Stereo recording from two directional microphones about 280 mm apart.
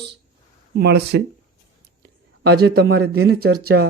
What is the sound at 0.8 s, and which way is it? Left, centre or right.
Speech, right.